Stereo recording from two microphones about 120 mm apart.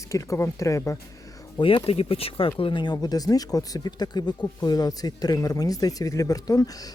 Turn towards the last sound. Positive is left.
turn(degrees=30)  # may be behind; listen again after turning